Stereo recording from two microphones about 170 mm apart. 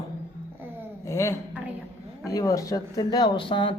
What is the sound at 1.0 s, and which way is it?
A man's voice, 15° left (ahead or behind).